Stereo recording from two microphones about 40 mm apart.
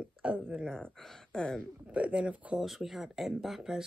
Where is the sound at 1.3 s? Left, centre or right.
Centre.